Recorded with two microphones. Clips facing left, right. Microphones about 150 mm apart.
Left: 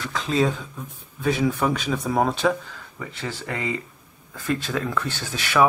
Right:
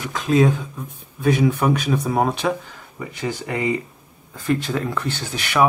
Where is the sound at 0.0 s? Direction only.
15° right (ahead or behind).